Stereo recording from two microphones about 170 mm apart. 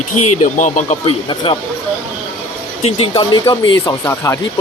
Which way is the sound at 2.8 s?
30° left (ahead or behind).